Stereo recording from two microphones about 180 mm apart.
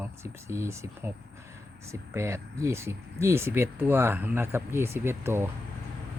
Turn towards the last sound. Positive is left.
turn(degrees=-15)  # may be behind; listen again after turning